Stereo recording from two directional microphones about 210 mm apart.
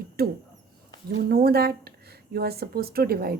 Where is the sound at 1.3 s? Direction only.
50° right (ahead or behind).